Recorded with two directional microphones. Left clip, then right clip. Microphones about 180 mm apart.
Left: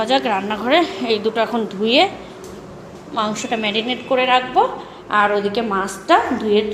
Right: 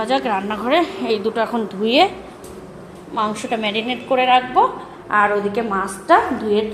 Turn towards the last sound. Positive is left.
turn(degrees=-5)  # may be behind; listen again after turning